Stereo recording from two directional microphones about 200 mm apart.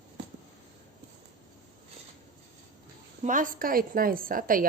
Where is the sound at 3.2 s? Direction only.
40° right (ahead or behind).